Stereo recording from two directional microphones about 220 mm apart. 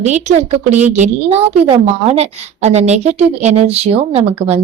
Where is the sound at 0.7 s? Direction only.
10° right (ahead or behind).